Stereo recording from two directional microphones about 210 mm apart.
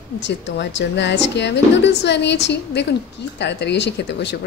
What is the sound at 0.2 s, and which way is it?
Speech, 55° left (ahead or behind).